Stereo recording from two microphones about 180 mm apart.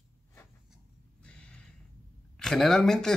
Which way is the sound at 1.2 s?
5° left (ahead or behind).